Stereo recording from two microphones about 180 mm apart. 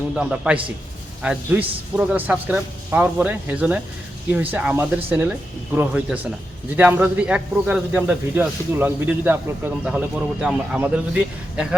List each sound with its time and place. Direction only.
0.1 s a man's voice: 5° right (ahead or behind)